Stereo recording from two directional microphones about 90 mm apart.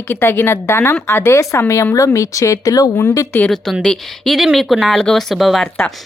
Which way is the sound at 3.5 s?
5° left (ahead or behind).